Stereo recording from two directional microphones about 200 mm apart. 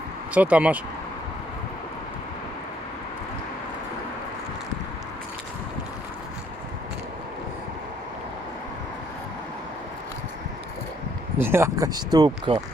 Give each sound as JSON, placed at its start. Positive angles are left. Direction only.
{"t": 0.3, "sound": "speech", "side_deg": -5}
{"t": 11.3, "sound": "speech", "side_deg": -10}